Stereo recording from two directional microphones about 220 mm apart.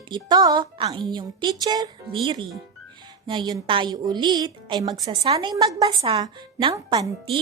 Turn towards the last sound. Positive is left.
turn(degrees=-15)  # may be behind; listen again after turning